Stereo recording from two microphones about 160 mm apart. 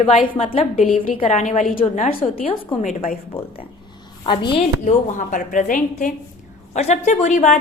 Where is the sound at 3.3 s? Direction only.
35° left (ahead or behind).